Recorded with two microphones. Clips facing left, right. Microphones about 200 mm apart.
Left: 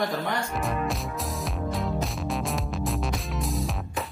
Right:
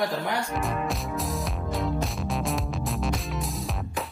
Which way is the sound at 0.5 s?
Centre (ahead or behind).